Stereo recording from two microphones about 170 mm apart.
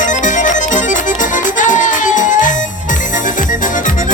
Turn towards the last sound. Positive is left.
turn(degrees=50)  # may be behind; listen again after turning